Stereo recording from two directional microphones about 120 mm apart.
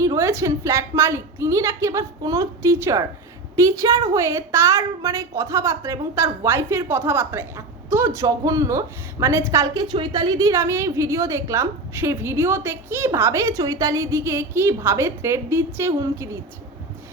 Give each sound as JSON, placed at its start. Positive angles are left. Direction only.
{"t": 0.0, "sound": "a woman's voice", "side_deg": -25}